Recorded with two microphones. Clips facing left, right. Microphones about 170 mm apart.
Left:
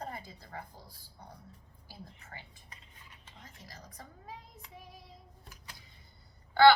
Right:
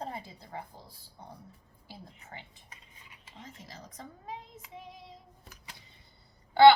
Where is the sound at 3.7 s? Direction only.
25° right (ahead or behind).